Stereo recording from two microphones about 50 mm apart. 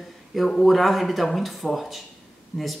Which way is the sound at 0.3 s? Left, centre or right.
Centre.